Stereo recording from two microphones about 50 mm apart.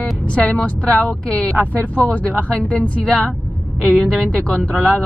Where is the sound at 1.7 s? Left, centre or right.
Left.